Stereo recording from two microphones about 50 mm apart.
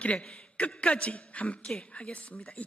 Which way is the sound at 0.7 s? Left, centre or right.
Left.